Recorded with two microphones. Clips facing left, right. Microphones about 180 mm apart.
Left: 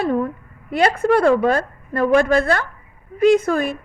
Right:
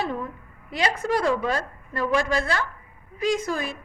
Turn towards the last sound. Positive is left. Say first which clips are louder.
# left 10 dB
turn(degrees=55)  # may be behind; listen again after turning